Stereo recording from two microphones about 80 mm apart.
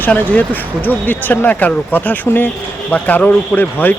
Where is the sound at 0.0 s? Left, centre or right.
Left.